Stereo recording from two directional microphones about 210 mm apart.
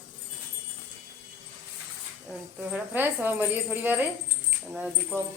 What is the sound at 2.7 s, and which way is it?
A woman's voice, 10° right (ahead or behind).